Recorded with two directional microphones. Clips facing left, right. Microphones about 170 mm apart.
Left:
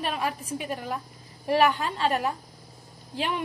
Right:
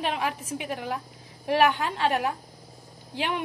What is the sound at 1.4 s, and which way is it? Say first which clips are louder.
A woman's voice: even; 15° right (ahead or behind).